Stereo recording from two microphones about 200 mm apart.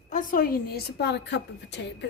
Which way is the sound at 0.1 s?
40° left (ahead or behind).